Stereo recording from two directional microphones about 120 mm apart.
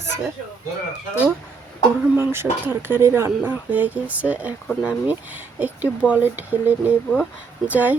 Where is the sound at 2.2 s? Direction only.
20° right (ahead or behind).